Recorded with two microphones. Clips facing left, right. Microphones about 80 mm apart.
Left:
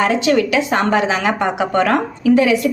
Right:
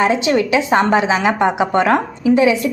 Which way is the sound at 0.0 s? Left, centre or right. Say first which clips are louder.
Even; right.